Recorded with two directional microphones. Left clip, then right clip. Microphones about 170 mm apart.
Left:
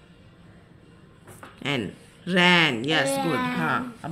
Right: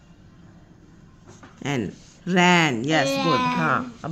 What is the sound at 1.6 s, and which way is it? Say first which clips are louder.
Speech: even; 40° right (ahead or behind).